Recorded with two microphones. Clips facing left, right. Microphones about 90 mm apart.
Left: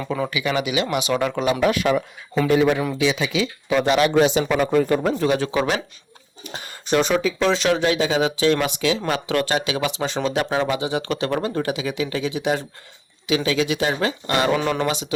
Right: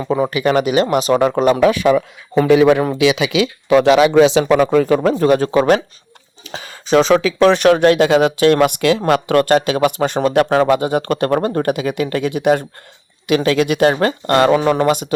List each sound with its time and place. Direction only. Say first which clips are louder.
0.0 s speech: right 7 dB; 25° right (ahead or behind)
0.3 s speech: right 8 dB; 45° right (ahead or behind)
2.5 s speech: right 7 dB; 75° right (ahead or behind)
5.1 s speech: right 7 dB; 45° right (ahead or behind)
7.0 s speech: right 9 dB; 90° right; by 9.3 s 60° right (ahead or behind)
9.3 s speech: right 7 dB; 50° right (ahead or behind)
14.5 s a man's voice: right 7 dB; 35° right (ahead or behind)
14.8 s speech: right 8 dB; 50° right (ahead or behind)